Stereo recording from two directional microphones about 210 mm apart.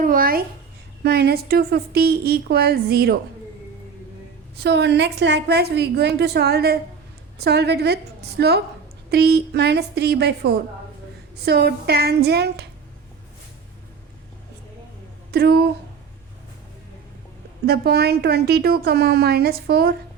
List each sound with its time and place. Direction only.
0.0 s a child's voice: 45° right (ahead or behind)
4.6 s a woman's voice: 55° right (ahead or behind)
15.3 s a woman's voice: 50° right (ahead or behind)
17.7 s a woman's voice: 50° right (ahead or behind)